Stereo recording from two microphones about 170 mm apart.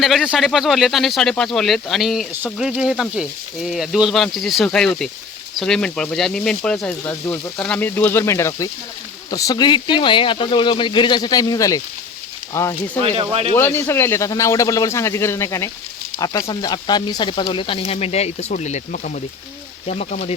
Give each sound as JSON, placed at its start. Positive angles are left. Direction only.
{"t": 0.0, "sound": "speech", "side_deg": 0}
{"t": 13.0, "sound": "speech", "side_deg": -35}
{"t": 13.6, "sound": "speech", "side_deg": 15}